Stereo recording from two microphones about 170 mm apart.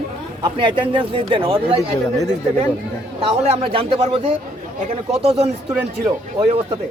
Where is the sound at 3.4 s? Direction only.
35° right (ahead or behind).